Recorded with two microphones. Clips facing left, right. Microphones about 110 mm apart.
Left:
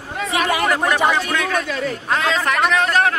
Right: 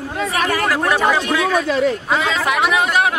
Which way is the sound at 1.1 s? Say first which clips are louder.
Right 3 dB; 5° right (ahead or behind).